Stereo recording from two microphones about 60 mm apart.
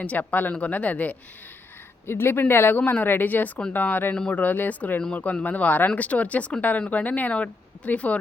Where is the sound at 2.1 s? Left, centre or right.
Left.